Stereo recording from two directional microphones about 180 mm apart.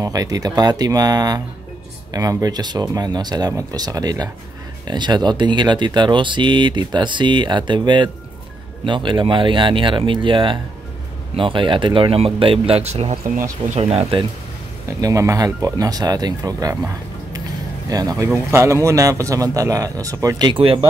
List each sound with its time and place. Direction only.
0.0 s speech: 20° right (ahead or behind)
14.9 s speech: 20° right (ahead or behind)